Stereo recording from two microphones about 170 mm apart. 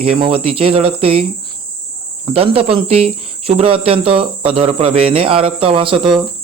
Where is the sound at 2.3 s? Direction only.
35° right (ahead or behind).